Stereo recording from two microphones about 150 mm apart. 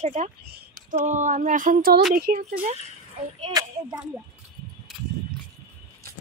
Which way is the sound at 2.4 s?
50° right (ahead or behind).